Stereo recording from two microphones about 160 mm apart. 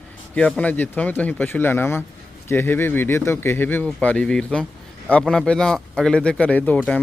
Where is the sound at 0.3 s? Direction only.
5° left (ahead or behind).